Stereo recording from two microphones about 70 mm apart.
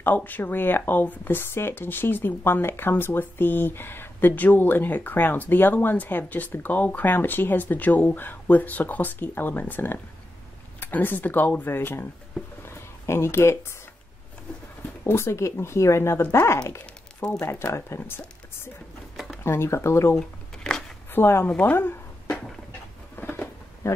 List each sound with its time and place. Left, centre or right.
0.0 s speech: left
12.6 s a sound: left
15.0 s speech: left
19.1 s a sound: centre
19.4 s speech: left
20.2 s shuffling cards: centre
21.1 s speech: left
21.5 s speech: left
23.2 s patter: left